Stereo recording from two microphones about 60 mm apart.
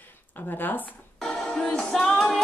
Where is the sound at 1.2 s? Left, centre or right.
Centre.